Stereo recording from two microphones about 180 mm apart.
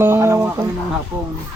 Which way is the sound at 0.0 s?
15° right (ahead or behind).